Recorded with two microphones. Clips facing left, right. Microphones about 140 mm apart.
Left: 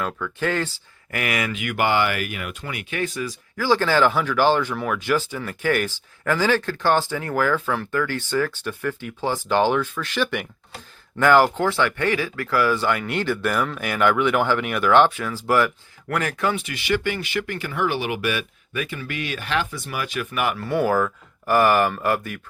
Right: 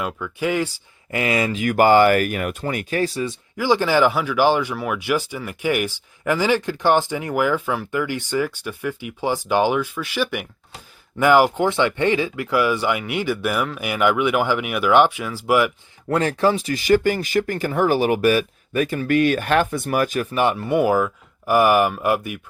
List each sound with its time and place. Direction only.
0.0 s speech: 10° right (ahead or behind)
1.1 s speech: 25° right (ahead or behind)
3.6 s speech: 15° right (ahead or behind)
16.0 s speech: 30° right (ahead or behind); by 20.2 s 45° right (ahead or behind)
20.3 s speech: 30° right (ahead or behind)